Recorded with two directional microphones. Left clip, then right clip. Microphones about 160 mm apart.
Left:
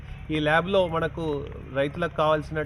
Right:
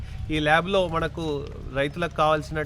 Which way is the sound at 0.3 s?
15° right (ahead or behind).